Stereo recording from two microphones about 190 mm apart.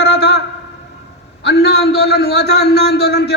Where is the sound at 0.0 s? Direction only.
65° left (ahead or behind).